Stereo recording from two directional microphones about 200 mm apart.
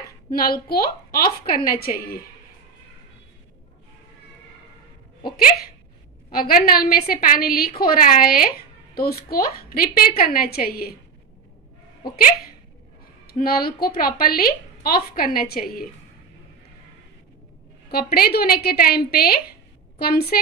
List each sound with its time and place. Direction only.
0.3 s a woman's voice: 50° left (ahead or behind)
6.3 s a woman's voice: 45° left (ahead or behind)
13.3 s a woman's voice: 50° left (ahead or behind)
17.9 s a woman's voice: 50° left (ahead or behind)